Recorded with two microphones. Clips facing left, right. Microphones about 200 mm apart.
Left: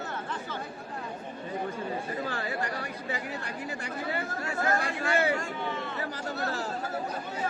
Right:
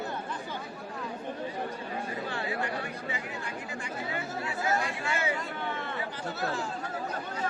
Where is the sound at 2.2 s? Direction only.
40° left (ahead or behind).